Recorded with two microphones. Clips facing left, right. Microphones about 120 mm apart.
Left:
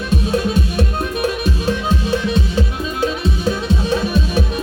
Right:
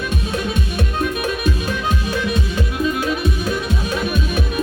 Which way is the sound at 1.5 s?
30° left (ahead or behind).